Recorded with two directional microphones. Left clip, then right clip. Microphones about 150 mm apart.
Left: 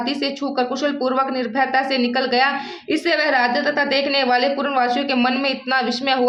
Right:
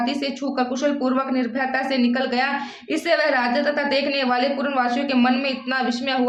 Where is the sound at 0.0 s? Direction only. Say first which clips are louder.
Left 2 dB; 20° left (ahead or behind).